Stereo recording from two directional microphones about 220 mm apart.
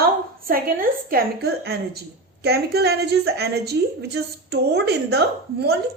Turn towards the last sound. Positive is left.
turn(degrees=-50)  # may be behind; listen again after turning